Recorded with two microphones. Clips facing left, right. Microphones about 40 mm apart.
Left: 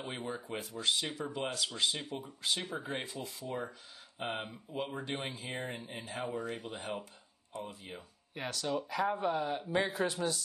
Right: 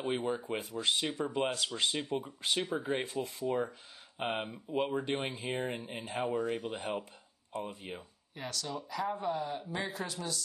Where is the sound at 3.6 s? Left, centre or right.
Right.